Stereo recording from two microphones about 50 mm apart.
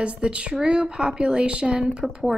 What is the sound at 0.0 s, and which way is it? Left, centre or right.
A woman's voice, right.